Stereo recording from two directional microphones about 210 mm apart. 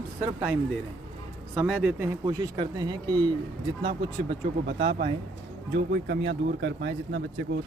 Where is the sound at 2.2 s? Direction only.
20° right (ahead or behind).